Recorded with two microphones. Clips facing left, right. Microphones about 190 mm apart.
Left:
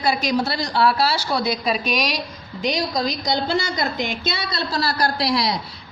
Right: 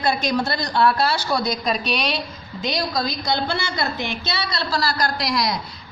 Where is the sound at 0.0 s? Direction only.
10° left (ahead or behind).